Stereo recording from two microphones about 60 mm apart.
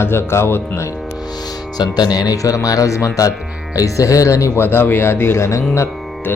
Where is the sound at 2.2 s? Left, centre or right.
Left.